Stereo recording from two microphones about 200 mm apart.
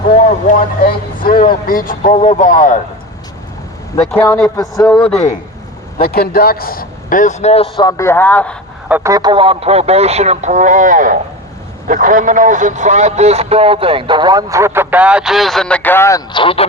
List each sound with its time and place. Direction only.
0.2 s speech: 40° left (ahead or behind)
4.1 s a man's voice: 5° left (ahead or behind)
6.0 s speech: 50° left (ahead or behind); by 8.5 s 10° left (ahead or behind)
8.9 s a man's voice: 15° right (ahead or behind); by 16.6 s 25° left (ahead or behind)